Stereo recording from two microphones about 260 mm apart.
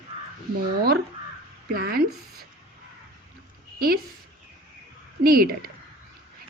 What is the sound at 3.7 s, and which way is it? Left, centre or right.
Speech, right.